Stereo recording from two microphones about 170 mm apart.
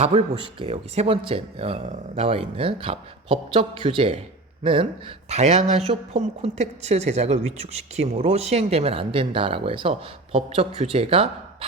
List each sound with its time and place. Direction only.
0.0 s speech: 35° right (ahead or behind)